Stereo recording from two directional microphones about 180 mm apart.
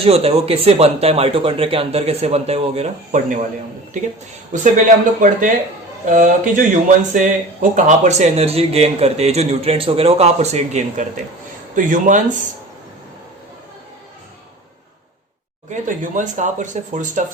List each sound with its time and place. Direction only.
0.0 s speech: 35° right (ahead or behind)
4.5 s speech: 45° right (ahead or behind)
15.7 s speech: 45° right (ahead or behind)